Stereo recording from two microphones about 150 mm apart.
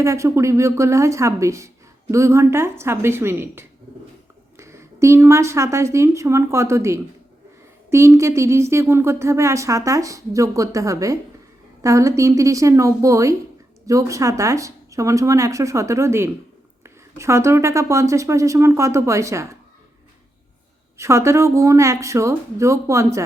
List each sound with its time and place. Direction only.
0.0 s speech: 20° right (ahead or behind)
21.0 s speech: 20° right (ahead or behind)